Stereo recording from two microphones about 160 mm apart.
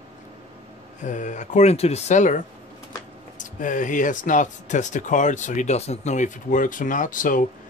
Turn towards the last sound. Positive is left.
turn(degrees=55)  # may be behind; listen again after turning